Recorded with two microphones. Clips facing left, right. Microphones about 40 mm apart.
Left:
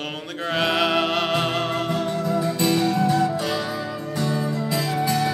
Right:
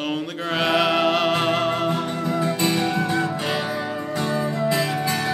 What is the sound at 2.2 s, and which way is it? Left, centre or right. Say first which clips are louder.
Music: right 1 dB; right.